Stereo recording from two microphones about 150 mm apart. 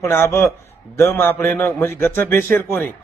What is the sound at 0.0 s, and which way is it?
A man's voice, 15° left (ahead or behind).